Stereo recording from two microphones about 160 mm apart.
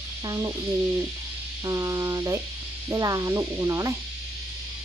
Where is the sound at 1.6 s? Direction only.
20° right (ahead or behind).